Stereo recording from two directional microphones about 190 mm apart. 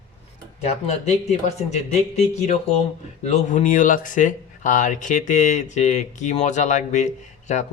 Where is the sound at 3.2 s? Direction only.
40° left (ahead or behind).